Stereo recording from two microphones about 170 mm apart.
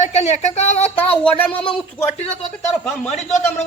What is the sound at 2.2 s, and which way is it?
Speech, 40° left (ahead or behind).